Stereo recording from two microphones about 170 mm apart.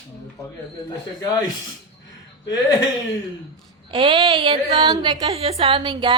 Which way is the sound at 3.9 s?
30° right (ahead or behind).